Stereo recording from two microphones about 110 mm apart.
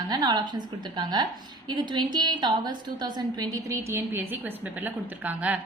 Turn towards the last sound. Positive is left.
turn(degrees=-15)  # may be behind; listen again after turning